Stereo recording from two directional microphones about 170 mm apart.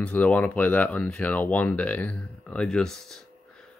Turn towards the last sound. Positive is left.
turn(degrees=0)  # may be behind; listen again after turning